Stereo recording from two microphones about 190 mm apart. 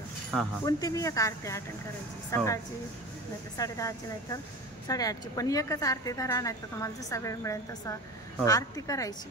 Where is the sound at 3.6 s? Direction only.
15° left (ahead or behind).